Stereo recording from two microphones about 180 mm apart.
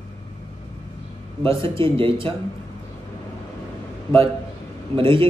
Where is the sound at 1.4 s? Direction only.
30° right (ahead or behind).